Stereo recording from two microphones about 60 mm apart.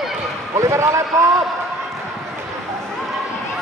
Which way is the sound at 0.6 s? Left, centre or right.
Right.